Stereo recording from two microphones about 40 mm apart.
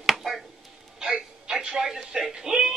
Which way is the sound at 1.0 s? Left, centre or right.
Centre.